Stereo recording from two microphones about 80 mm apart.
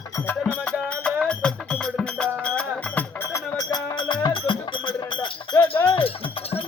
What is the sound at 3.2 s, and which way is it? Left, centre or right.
Music, left.